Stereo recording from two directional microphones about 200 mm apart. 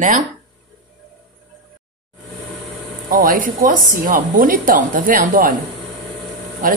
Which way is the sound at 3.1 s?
45° right (ahead or behind).